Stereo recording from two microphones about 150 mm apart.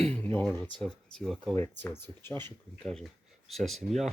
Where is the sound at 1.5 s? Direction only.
15° left (ahead or behind).